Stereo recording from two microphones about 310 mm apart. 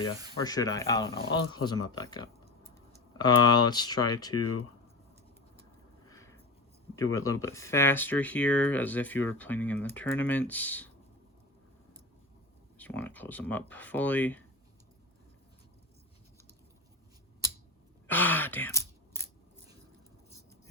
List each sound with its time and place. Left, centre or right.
0.3 s speech: centre
4.4 s speech: left
6.1 s a sound: centre
6.9 s speech: centre
12.7 s speech: centre
18.1 s sigh: centre